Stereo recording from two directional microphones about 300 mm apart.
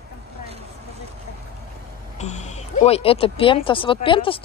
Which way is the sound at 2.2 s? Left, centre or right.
Left.